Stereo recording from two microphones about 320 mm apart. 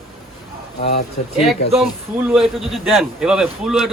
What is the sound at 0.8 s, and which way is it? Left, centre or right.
Speech, centre.